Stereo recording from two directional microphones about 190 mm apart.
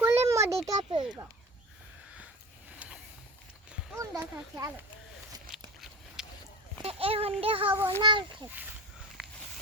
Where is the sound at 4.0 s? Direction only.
15° right (ahead or behind).